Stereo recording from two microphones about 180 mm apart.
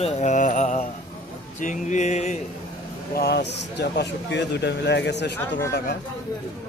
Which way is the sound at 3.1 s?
60° left (ahead or behind).